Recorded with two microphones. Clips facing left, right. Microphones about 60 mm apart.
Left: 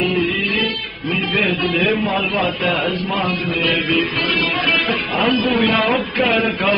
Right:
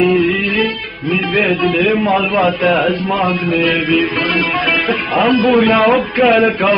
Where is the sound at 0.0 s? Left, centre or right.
Right.